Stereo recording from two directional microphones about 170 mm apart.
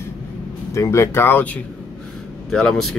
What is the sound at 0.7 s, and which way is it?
Speech, 15° left (ahead or behind).